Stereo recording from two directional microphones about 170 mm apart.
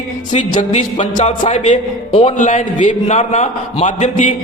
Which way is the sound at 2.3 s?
45° left (ahead or behind).